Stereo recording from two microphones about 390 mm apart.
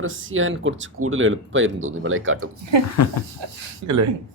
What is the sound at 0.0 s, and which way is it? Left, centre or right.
Speech, right.